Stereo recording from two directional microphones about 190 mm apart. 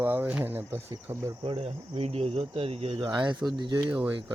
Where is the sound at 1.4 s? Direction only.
30° right (ahead or behind).